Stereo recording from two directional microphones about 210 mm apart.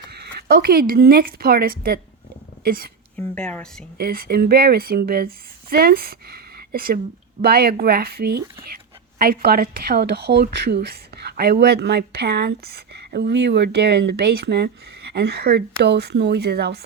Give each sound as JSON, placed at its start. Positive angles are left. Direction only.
{"t": 0.1, "sound": "a woman's voice", "side_deg": -50}
{"t": 3.2, "sound": "speech", "side_deg": 5}
{"t": 3.9, "sound": "a woman's voice", "side_deg": -45}